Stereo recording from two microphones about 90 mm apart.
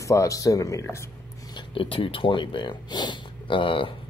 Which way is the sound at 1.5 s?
70° left (ahead or behind).